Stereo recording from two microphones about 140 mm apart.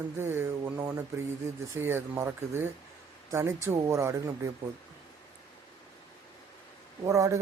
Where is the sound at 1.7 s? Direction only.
15° right (ahead or behind).